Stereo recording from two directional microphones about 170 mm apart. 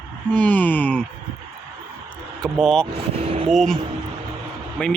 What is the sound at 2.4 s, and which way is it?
Speech, centre (ahead or behind).